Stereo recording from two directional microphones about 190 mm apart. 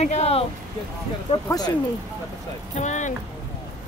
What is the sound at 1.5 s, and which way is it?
Speech, 20° left (ahead or behind).